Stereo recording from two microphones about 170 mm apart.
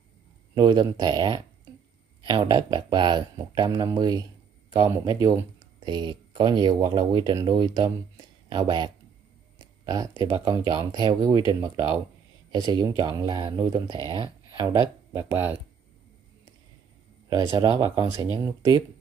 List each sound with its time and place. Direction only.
0.6 s speech: 25° right (ahead or behind)
17.3 s speech: 25° right (ahead or behind)
17.9 s speech: 15° right (ahead or behind)